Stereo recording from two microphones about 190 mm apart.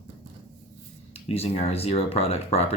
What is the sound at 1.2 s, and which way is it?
Speech, 30° left (ahead or behind).